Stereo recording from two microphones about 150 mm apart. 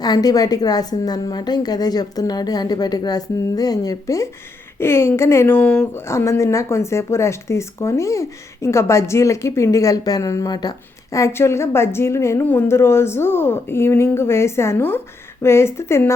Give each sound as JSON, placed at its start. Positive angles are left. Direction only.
{"t": 0.0, "sound": "a woman's voice", "side_deg": 25}